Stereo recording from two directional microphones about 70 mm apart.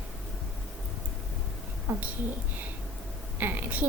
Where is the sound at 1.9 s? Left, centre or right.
Right.